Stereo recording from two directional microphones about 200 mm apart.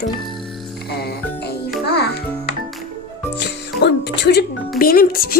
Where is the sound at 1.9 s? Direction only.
55° left (ahead or behind).